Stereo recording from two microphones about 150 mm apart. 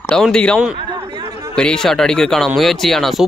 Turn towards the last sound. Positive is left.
turn(degrees=0)  # may be behind; listen again after turning